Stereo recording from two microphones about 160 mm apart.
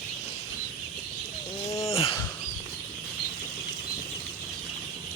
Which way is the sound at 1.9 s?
35° left (ahead or behind).